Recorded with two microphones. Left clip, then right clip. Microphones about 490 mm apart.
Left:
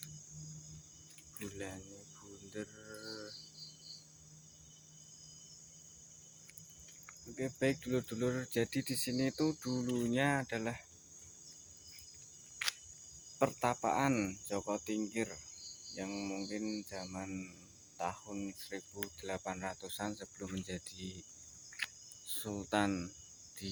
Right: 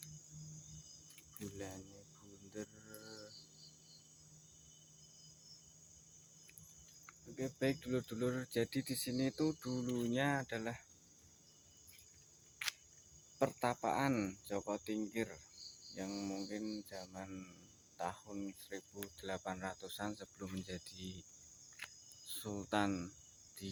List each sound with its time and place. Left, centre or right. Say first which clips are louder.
1.4 s cricket: left 3 dB; right
7.3 s speech: left 3 dB; right
12.6 s a sound: left 4 dB; right
13.4 s speech: left 3 dB; right
21.8 s cricket: left 10 dB; right
22.3 s speech: left 3 dB; right